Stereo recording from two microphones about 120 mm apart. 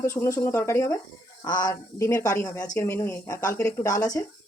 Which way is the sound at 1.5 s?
35° left (ahead or behind).